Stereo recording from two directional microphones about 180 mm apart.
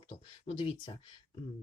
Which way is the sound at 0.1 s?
30° left (ahead or behind).